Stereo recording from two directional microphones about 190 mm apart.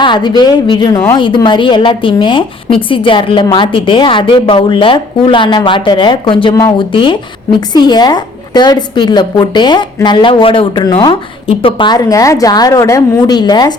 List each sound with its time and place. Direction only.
0.0 s a woman's voice: 25° left (ahead or behind)